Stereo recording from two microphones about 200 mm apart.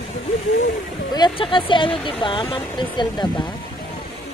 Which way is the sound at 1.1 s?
25° left (ahead or behind).